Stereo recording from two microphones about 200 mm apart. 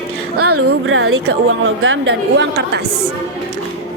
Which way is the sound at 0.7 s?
80° right.